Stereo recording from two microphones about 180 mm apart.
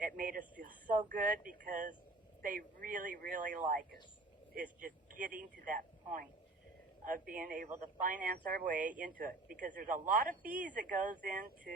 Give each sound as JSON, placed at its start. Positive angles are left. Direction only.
{"t": 0.0, "sound": "a sound", "side_deg": -50}
{"t": 0.6, "sound": "speech", "side_deg": -50}
{"t": 7.0, "sound": "speech", "side_deg": -50}